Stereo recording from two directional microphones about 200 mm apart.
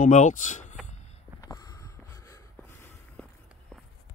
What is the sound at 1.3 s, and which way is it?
Vehicle, 15° left (ahead or behind).